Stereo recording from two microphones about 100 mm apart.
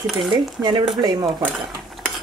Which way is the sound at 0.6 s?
10° right (ahead or behind).